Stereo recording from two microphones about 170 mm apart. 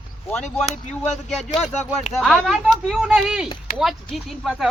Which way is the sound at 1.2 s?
Centre (ahead or behind).